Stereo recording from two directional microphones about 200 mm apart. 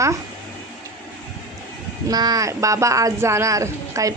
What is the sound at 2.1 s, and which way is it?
Speech, 20° right (ahead or behind).